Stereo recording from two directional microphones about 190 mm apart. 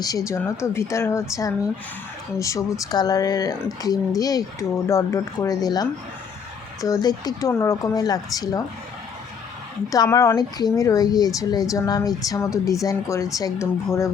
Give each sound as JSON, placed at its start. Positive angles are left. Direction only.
{"t": 0.3, "sound": "speech", "side_deg": 15}
{"t": 9.9, "sound": "speech", "side_deg": 15}